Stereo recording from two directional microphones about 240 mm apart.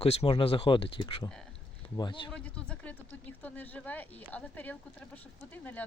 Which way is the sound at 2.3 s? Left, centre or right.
Centre.